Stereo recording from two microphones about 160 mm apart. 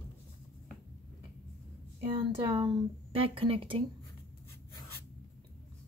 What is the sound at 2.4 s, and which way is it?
Speech, 30° right (ahead or behind).